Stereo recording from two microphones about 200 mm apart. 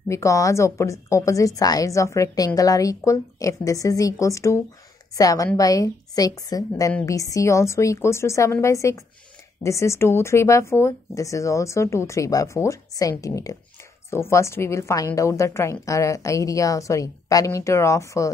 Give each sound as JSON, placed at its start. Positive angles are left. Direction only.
{"t": 0.1, "sound": "a woman's voice", "side_deg": 15}